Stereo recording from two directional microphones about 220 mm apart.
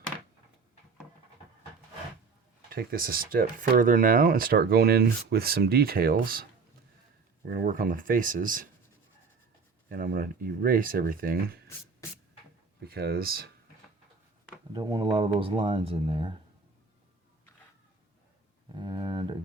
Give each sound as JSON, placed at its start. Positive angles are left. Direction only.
{"t": 2.6, "sound": "speech", "side_deg": -40}
{"t": 7.4, "sound": "speech", "side_deg": -40}
{"t": 9.9, "sound": "speech", "side_deg": -40}
{"t": 12.8, "sound": "speech", "side_deg": -45}
{"t": 14.7, "sound": "speech", "side_deg": -20}
{"t": 18.8, "sound": "a sound", "side_deg": -20}